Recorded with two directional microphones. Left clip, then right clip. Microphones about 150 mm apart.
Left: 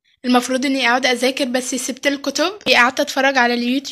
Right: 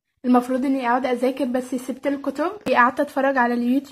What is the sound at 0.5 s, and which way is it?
Speech, 10° left (ahead or behind).